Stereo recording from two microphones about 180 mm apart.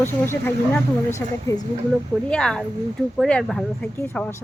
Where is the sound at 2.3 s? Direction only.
5° left (ahead or behind).